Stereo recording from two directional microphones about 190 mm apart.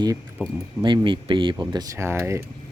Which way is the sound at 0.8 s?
25° right (ahead or behind).